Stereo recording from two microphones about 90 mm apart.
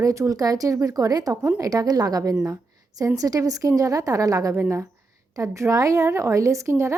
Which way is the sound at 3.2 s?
40° right (ahead or behind).